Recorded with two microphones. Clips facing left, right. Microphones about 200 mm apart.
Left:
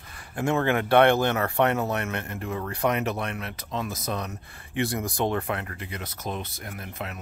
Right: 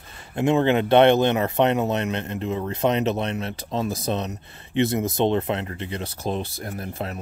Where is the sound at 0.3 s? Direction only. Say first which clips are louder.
Right 5 dB; 20° right (ahead or behind).